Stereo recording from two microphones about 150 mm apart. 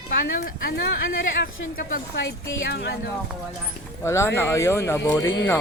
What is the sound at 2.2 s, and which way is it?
Speech, 90° left.